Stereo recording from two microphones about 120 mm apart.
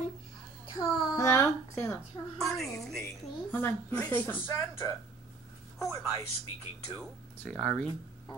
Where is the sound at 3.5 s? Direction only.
20° left (ahead or behind).